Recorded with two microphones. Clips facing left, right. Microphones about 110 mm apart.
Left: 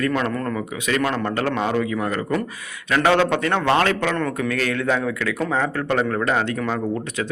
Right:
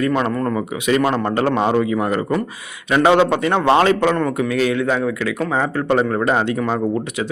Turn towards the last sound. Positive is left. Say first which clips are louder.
# right 4 dB
turn(degrees=-20)  # may be behind; listen again after turning